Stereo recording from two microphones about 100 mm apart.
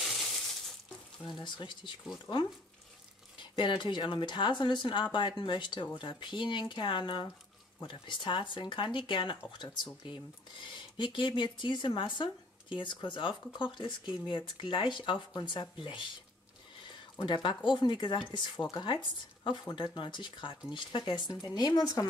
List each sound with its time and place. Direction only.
1.4 s speech: 50° left (ahead or behind)
3.5 s speech: 50° left (ahead or behind)
17.2 s speech: 50° left (ahead or behind)